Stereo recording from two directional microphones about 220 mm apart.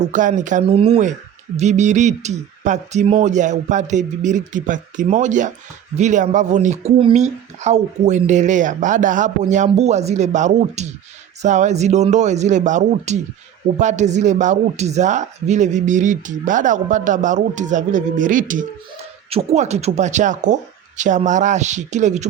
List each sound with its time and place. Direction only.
0.0 s speech: 35° right (ahead or behind)